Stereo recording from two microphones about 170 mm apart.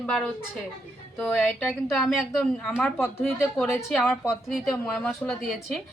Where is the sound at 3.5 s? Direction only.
5° left (ahead or behind).